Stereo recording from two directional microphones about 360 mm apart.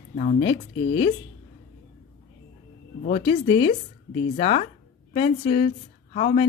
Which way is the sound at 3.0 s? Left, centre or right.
Centre.